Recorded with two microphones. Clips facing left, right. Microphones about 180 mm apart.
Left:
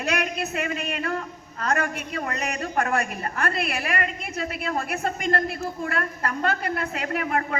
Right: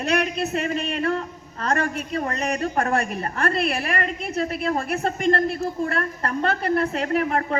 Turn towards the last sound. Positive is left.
turn(degrees=-35)  # may be behind; listen again after turning